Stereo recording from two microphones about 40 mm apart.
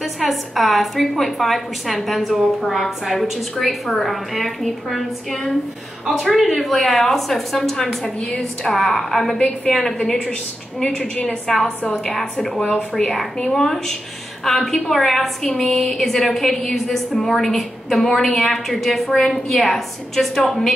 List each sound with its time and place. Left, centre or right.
0.0 s a woman's voice: centre
8.4 s a woman's voice: centre
11.4 s a woman's voice: centre
12.5 s speech: left
13.5 s a woman's voice: centre